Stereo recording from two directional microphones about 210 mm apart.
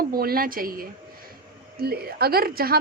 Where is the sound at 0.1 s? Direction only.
45° right (ahead or behind).